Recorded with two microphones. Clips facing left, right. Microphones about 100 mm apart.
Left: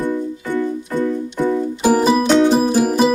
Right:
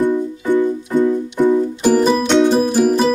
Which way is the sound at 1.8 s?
5° left (ahead or behind).